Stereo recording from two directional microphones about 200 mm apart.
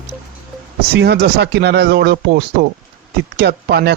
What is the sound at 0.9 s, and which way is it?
Speech, 55° right (ahead or behind).